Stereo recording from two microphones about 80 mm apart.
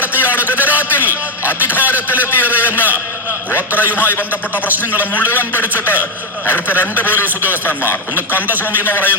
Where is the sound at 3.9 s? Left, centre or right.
Left.